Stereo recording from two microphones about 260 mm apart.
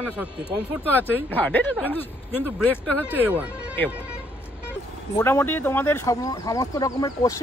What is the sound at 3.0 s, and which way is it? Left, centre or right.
Speech, centre.